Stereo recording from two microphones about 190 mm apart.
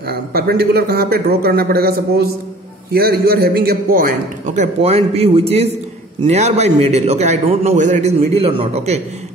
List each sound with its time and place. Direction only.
0.1 s a man's voice: 55° right (ahead or behind); by 9.0 s 35° right (ahead or behind)